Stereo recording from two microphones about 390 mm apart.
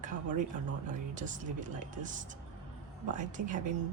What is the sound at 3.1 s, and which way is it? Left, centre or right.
Speech, centre.